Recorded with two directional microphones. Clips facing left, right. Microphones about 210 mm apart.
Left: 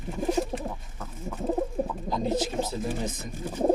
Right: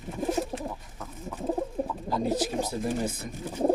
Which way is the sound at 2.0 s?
10° right (ahead or behind).